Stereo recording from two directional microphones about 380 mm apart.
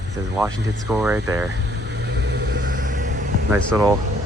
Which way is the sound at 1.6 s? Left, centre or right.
Right.